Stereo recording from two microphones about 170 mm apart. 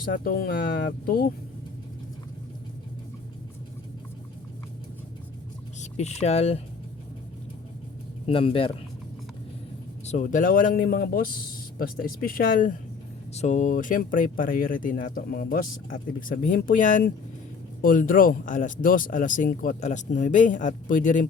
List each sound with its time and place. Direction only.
0.0 s speech: 60° left (ahead or behind)
5.8 s speech: 40° left (ahead or behind)
8.3 s speech: 30° left (ahead or behind)
10.1 s speech: 50° left (ahead or behind)
13.3 s speech: 45° left (ahead or behind)